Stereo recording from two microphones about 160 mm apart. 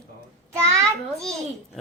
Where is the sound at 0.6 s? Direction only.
20° right (ahead or behind).